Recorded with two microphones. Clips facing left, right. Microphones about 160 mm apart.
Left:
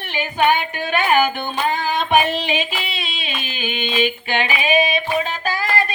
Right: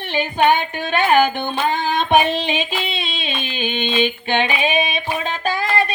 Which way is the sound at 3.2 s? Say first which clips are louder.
Right 3 dB; 25° right (ahead or behind).